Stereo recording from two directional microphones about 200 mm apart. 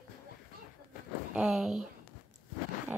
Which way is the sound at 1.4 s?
5° right (ahead or behind).